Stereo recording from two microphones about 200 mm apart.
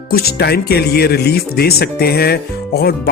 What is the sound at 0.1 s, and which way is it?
Speech, 50° left (ahead or behind).